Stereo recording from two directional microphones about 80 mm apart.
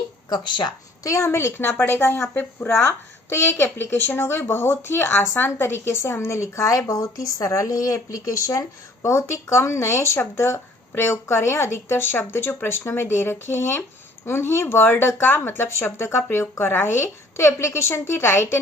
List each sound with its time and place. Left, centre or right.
0.3 s speech: left
1.0 s speech: left
2.3 s speech: left